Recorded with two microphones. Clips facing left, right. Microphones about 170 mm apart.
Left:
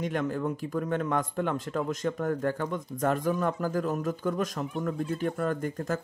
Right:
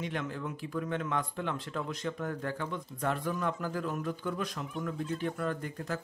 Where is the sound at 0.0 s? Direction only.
45° left (ahead or behind).